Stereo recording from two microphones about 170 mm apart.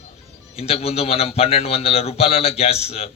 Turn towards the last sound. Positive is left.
turn(degrees=35)  # may be behind; listen again after turning